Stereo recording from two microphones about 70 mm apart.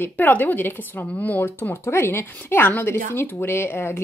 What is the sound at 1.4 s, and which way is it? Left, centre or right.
Speech, left.